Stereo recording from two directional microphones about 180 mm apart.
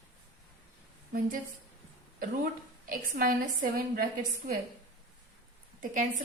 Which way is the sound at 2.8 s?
50° right (ahead or behind).